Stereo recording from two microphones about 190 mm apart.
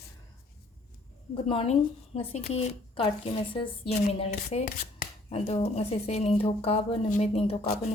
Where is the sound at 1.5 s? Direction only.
30° left (ahead or behind).